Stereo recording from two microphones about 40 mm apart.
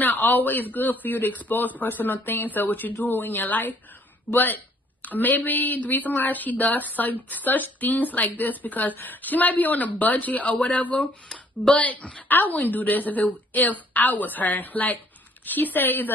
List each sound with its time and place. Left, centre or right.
0.0 s a woman's voice: left
5.0 s a woman's voice: left